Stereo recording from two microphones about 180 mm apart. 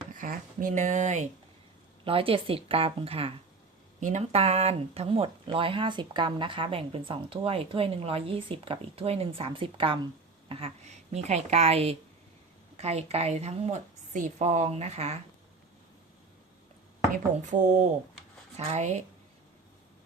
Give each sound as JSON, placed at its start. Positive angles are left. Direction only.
{"t": 0.2, "sound": "speech", "side_deg": -45}
{"t": 2.0, "sound": "speech", "side_deg": -30}
{"t": 17.5, "sound": "speech", "side_deg": -45}